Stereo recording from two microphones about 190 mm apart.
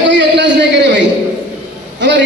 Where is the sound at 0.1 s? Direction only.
70° right (ahead or behind).